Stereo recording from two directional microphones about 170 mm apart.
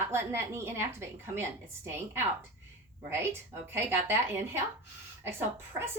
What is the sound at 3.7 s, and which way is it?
Speech, 15° right (ahead or behind).